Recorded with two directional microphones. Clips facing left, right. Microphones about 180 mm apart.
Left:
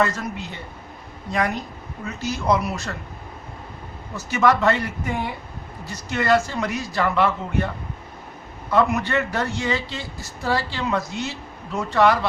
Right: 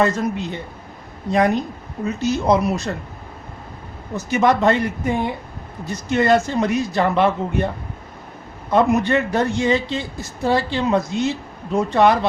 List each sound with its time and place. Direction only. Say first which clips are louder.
0.0 s a woman's voice: right 4 dB; 20° right (ahead or behind)
4.3 s a woman's voice: right 3 dB; 20° right (ahead or behind)
8.7 s a woman's voice: right 4 dB; 20° right (ahead or behind)